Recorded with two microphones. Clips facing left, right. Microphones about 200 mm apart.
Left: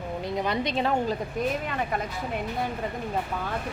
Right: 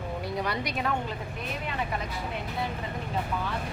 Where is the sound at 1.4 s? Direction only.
40° left (ahead or behind).